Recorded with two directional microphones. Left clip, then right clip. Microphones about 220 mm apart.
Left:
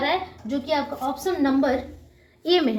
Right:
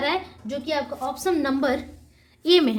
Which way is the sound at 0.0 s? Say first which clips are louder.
Left 1 dB; 50° right (ahead or behind).